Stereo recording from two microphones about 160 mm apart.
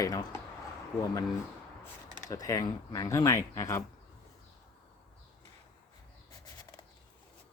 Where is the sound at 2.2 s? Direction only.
20° left (ahead or behind).